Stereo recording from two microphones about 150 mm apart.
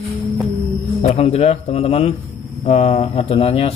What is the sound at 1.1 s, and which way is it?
Speech, 45° left (ahead or behind).